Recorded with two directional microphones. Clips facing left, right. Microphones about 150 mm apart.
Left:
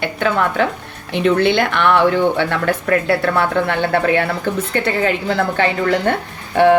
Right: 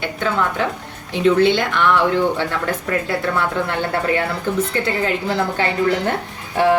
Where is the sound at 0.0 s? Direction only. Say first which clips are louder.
Left 3 dB; 60° left (ahead or behind).